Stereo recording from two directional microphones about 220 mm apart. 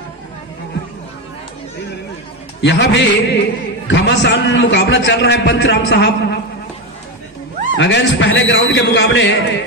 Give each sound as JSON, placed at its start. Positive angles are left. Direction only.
{"t": 2.6, "sound": "a man's voice", "side_deg": 50}
{"t": 7.7, "sound": "a man's voice", "side_deg": 55}